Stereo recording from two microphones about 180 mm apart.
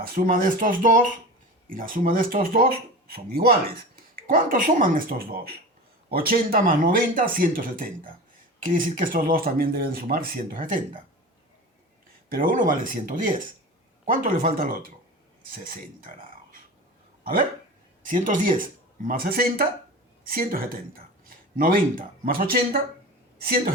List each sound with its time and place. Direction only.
0.0 s speech: 55° right (ahead or behind)
12.3 s speech: 50° right (ahead or behind)
18.0 s a woman's voice: 45° right (ahead or behind)